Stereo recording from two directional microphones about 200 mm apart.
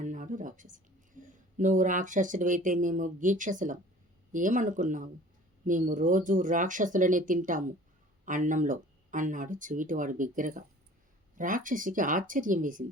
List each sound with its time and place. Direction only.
0.0 s speech: 40° right (ahead or behind)